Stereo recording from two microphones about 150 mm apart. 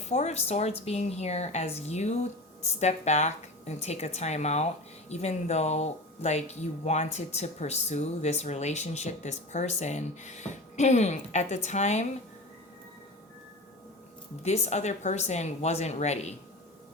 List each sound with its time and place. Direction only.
0.1 s a woman's voice: 50° left (ahead or behind)
14.4 s a woman's voice: 45° left (ahead or behind)